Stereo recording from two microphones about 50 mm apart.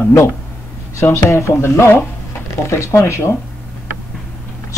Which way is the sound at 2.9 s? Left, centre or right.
Left.